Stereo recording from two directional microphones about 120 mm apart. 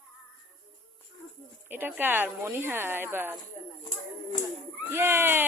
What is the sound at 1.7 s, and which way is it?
A woman's voice, 15° right (ahead or behind).